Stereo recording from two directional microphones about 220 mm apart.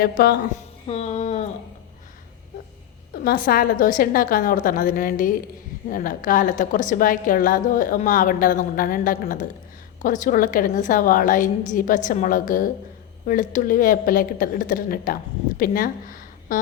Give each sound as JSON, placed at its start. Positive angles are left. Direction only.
{"t": 0.0, "sound": "a woman's voice", "side_deg": 45}
{"t": 0.9, "sound": "speech", "side_deg": 30}
{"t": 3.2, "sound": "a woman's voice", "side_deg": 40}